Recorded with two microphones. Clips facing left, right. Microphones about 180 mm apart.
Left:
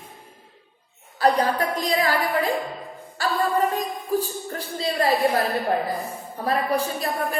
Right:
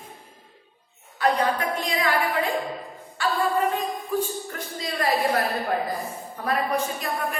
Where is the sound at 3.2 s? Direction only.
40° left (ahead or behind).